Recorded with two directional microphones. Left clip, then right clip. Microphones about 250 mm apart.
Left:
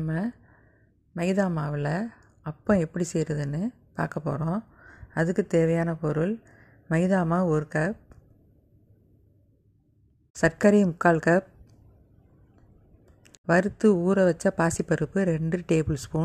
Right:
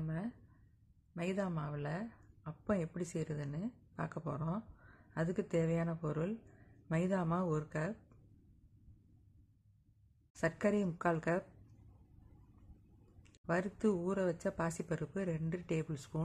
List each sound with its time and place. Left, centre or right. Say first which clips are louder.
0.0 s a sound: left 13 dB; left
1.1 s speech: left 13 dB; left
10.3 s speech: left 14 dB; left
13.2 s speech: left 14 dB; left